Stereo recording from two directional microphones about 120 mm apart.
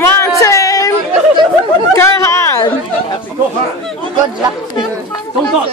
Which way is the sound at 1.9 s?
25° left (ahead or behind).